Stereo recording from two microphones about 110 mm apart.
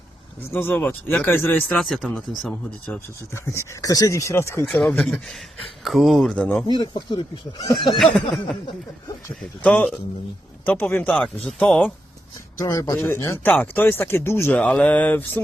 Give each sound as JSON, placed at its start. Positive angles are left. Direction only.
{"t": 0.5, "sound": "speech", "side_deg": 15}
{"t": 1.8, "sound": "speech", "side_deg": 0}
{"t": 4.6, "sound": "speech", "side_deg": 5}
{"t": 6.3, "sound": "speech", "side_deg": 10}
{"t": 6.7, "sound": "speech", "side_deg": 45}
{"t": 7.9, "sound": "speech", "side_deg": 0}
{"t": 11.1, "sound": "speech", "side_deg": 10}
{"t": 12.7, "sound": "speech", "side_deg": 30}
{"t": 14.5, "sound": "speech", "side_deg": 10}